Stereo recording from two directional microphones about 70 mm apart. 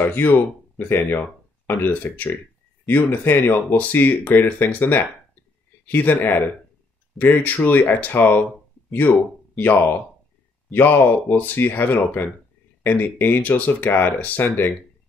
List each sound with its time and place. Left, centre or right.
0.0 s speech: left
9.6 s speech: left